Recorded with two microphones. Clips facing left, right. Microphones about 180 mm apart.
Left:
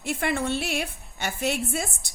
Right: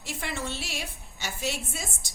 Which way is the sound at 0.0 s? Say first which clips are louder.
Left 8 dB; 55° left (ahead or behind).